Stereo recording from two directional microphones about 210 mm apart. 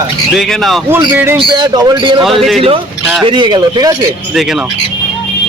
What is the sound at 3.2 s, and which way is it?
Speech, 20° right (ahead or behind).